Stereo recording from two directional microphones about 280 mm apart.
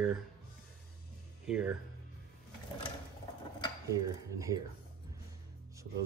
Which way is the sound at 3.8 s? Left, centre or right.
Centre.